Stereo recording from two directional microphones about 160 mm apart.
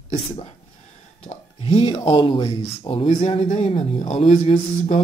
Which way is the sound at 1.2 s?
40° left (ahead or behind).